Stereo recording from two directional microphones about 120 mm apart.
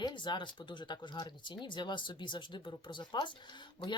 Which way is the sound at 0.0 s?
40° left (ahead or behind).